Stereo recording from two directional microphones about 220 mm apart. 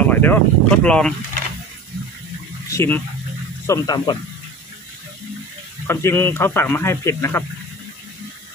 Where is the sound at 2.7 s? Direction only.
10° left (ahead or behind).